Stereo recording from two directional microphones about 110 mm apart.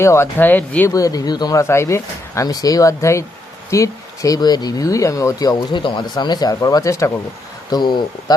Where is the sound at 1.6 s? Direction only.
25° left (ahead or behind).